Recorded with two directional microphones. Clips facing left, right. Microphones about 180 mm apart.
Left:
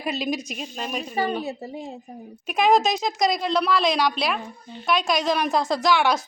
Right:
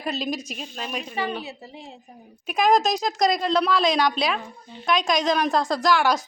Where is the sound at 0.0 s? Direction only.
10° left (ahead or behind).